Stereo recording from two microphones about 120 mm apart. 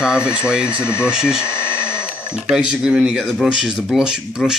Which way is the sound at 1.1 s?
5° right (ahead or behind).